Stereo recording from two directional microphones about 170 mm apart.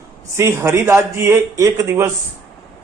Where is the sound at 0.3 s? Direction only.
15° right (ahead or behind).